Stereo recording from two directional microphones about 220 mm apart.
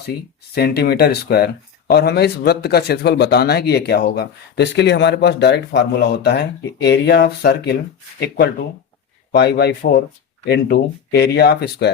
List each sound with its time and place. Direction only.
0.0 s speech: 45° left (ahead or behind)
9.3 s speech: 45° left (ahead or behind)